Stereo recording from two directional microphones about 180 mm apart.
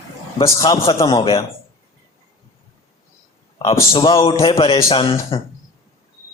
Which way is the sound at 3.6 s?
25° left (ahead or behind).